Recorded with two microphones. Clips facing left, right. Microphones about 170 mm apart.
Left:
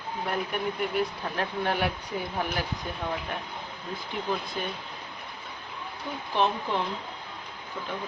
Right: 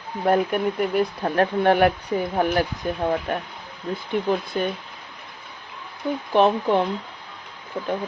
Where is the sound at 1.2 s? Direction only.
55° right (ahead or behind).